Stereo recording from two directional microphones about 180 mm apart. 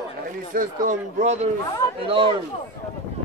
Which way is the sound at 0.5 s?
50° right (ahead or behind).